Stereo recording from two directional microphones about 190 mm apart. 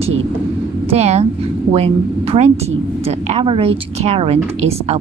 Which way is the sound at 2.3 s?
35° right (ahead or behind).